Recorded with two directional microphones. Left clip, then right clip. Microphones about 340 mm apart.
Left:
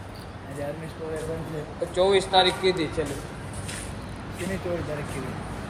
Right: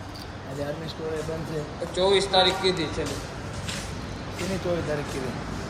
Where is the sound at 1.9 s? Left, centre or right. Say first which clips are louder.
Left 1 dB; left.